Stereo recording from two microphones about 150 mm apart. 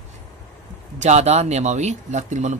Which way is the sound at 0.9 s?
50° right (ahead or behind).